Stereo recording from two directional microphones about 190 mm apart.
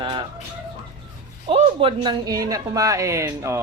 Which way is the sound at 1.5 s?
30° right (ahead or behind).